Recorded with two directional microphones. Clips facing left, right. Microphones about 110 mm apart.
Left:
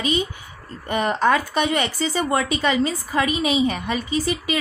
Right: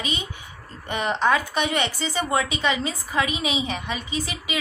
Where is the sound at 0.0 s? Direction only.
35° left (ahead or behind).